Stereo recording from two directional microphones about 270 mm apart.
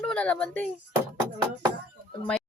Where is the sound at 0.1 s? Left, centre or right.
Centre.